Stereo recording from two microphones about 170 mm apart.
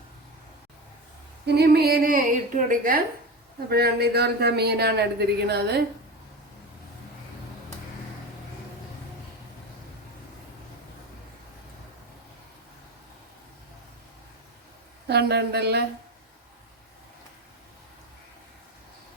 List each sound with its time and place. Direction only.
1.5 s a woman's voice: 70° right (ahead or behind); by 3.0 s 55° right (ahead or behind)
3.7 s speech: 70° right (ahead or behind)
15.0 s speech: 70° right (ahead or behind)